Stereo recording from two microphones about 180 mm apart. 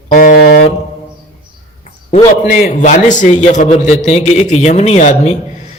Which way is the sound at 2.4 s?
45° left (ahead or behind).